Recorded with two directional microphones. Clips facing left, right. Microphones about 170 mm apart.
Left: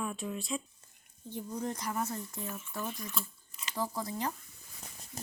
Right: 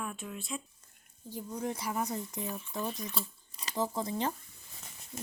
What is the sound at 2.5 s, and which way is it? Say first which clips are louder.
Speech: right 2 dB; 35° right (ahead or behind).